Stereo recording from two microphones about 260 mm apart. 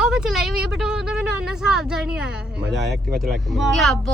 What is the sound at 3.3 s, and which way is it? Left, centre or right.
Speech, centre.